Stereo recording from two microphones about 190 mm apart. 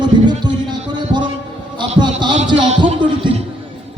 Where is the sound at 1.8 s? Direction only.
25° right (ahead or behind).